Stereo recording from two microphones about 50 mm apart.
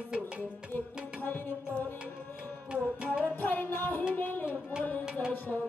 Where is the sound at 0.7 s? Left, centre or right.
Left.